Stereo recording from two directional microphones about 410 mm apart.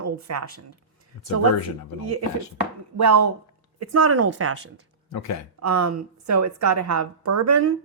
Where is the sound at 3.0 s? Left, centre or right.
Right.